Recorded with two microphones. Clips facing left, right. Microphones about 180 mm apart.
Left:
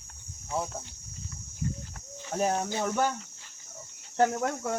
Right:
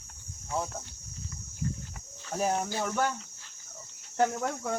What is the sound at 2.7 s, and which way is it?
Speech, 15° left (ahead or behind).